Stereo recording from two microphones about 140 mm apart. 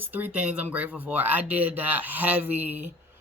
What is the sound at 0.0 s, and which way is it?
Speech, 10° right (ahead or behind).